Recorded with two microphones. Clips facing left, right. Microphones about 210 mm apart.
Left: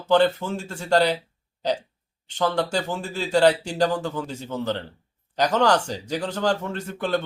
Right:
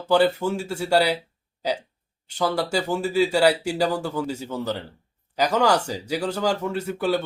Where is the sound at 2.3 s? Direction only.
10° right (ahead or behind).